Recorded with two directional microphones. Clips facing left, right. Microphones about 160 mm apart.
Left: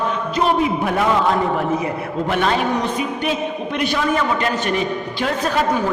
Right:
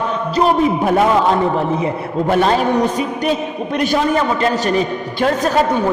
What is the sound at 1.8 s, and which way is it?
Speech, 35° right (ahead or behind).